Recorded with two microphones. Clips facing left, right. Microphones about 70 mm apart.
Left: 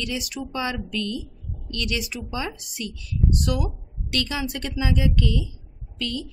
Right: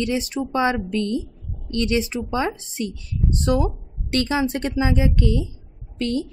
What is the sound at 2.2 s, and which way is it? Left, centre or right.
Speech, right.